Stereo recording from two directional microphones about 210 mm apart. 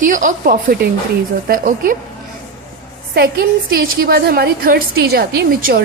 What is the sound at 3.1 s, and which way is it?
A woman's voice, 50° right (ahead or behind).